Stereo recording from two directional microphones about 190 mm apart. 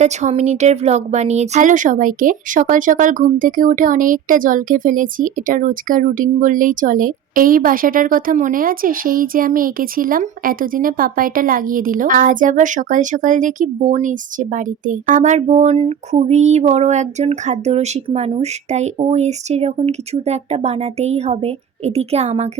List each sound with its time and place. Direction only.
0.0 s speech: 40° right (ahead or behind)